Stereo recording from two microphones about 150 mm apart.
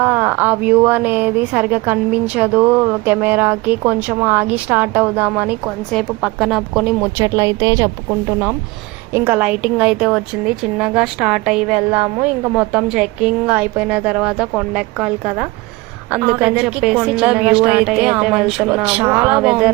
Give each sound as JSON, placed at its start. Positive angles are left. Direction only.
{"t": 0.0, "sound": "a woman's voice", "side_deg": -10}
{"t": 7.3, "sound": "a woman's voice", "side_deg": -25}